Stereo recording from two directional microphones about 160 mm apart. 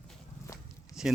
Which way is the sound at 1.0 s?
5° right (ahead or behind).